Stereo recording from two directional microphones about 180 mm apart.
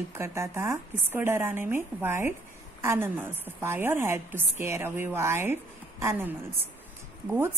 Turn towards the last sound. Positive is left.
turn(degrees=-10)  # may be behind; listen again after turning